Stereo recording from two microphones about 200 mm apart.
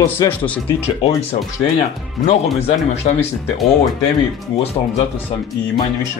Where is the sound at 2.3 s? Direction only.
30° left (ahead or behind).